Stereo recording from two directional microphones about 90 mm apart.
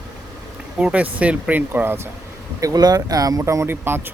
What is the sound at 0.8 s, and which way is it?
Speech, 15° right (ahead or behind).